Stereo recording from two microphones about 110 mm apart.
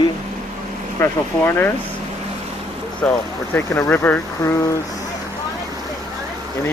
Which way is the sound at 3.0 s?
10° left (ahead or behind).